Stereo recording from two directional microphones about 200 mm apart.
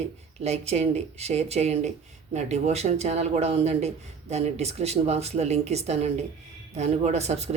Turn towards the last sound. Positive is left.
turn(degrees=-35)  # may be behind; listen again after turning